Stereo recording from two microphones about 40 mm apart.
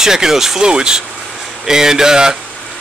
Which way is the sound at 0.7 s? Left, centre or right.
Right.